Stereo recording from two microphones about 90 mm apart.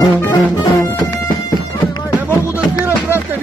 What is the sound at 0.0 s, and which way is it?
Music, 45° left (ahead or behind).